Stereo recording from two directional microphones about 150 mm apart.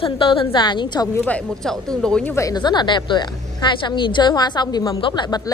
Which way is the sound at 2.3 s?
25° left (ahead or behind).